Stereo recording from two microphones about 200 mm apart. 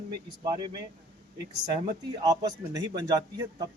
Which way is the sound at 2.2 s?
20° right (ahead or behind).